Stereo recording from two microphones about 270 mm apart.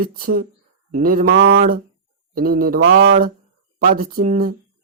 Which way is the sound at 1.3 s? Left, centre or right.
Right.